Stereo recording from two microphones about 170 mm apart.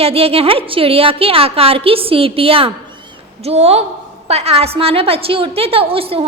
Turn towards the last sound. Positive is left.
turn(degrees=-35)  # may be behind; listen again after turning